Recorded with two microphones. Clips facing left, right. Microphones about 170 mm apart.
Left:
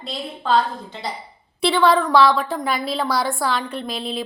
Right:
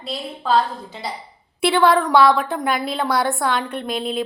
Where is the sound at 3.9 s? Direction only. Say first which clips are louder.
Right 6 dB; 50° right (ahead or behind).